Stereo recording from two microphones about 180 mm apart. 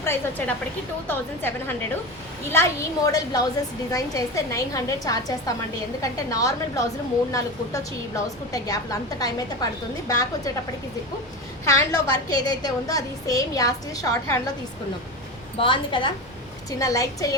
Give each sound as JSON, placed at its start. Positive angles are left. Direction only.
{"t": 0.0, "sound": "a woman's voice", "side_deg": 10}
{"t": 11.6, "sound": "a woman's voice", "side_deg": 15}
{"t": 15.5, "sound": "a woman's voice", "side_deg": 30}